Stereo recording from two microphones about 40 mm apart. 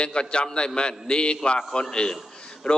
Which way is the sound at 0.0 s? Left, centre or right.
Left.